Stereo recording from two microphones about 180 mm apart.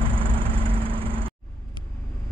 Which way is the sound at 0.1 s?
30° right (ahead or behind).